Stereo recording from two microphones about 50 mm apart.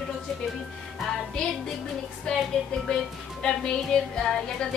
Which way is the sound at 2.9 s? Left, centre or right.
Centre.